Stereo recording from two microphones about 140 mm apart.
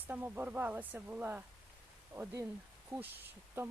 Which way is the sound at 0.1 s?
15° right (ahead or behind).